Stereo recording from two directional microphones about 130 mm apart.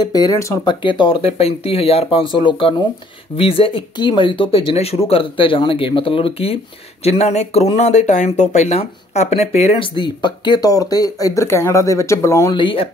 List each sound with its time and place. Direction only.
0.0 s speech: 30° left (ahead or behind)
0.7 s speech: 40° left (ahead or behind)
9.9 s speech: 35° left (ahead or behind)
12.5 s speech: 45° left (ahead or behind)